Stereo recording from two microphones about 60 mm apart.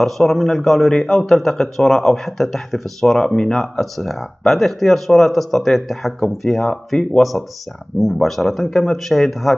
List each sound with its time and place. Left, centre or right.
0.0 s a man's voice: centre